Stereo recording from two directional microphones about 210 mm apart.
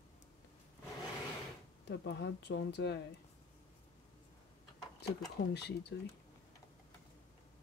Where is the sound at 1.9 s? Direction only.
55° left (ahead or behind).